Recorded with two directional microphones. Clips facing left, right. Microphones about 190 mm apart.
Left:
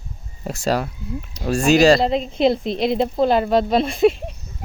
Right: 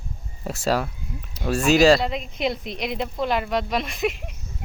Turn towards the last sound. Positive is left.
turn(degrees=30)  # may be behind; listen again after turning